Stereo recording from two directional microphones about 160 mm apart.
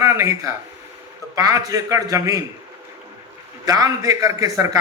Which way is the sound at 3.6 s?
20° right (ahead or behind).